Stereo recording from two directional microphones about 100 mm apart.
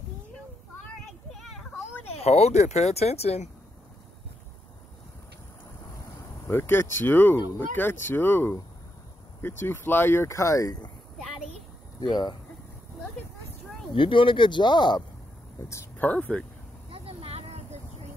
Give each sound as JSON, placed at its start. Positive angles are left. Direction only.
{"t": 2.1, "sound": "speech", "side_deg": 90}
{"t": 6.4, "sound": "speech", "side_deg": 25}
{"t": 12.1, "sound": "speech", "side_deg": 45}
{"t": 13.9, "sound": "speech", "side_deg": 60}
{"t": 16.0, "sound": "speech", "side_deg": 15}
{"t": 16.9, "sound": "vehicle", "side_deg": -75}